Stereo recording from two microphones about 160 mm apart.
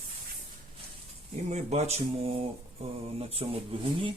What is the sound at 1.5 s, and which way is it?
Speech, 40° right (ahead or behind).